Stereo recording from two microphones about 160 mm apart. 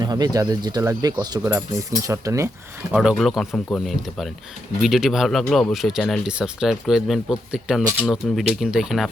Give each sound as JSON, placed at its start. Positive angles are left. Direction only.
{"t": 0.0, "sound": "speech", "side_deg": -25}
{"t": 2.9, "sound": "speech", "side_deg": -5}